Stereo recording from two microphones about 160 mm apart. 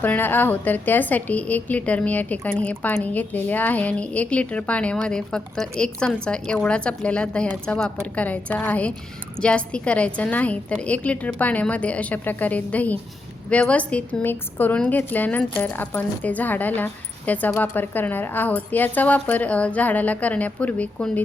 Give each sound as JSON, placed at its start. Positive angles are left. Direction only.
{"t": 0.0, "sound": "a woman's voice", "side_deg": 10}